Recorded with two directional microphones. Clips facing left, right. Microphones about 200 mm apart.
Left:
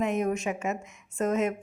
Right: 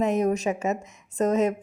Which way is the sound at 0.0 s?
40° right (ahead or behind).